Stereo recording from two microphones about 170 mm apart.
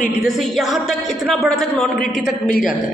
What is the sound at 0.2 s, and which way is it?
Speech, centre (ahead or behind).